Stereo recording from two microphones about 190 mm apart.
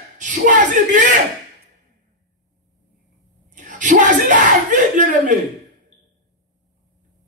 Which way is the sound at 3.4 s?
40° right (ahead or behind).